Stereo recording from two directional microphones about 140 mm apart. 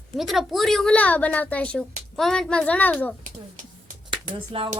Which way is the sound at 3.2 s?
65° right (ahead or behind).